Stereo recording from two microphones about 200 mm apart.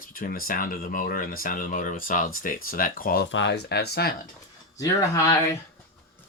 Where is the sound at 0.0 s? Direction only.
45° left (ahead or behind).